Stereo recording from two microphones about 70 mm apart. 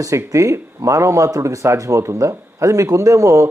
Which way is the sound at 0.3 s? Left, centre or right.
Right.